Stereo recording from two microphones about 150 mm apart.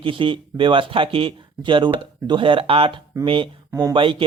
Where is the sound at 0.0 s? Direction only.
35° right (ahead or behind).